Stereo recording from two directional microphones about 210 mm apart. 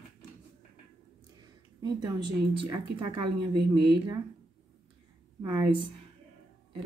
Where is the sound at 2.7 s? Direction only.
20° right (ahead or behind).